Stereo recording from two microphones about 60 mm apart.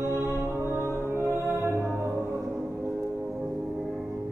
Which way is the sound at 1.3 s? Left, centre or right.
Right.